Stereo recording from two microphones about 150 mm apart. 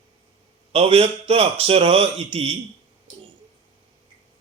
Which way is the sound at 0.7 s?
40° right (ahead or behind).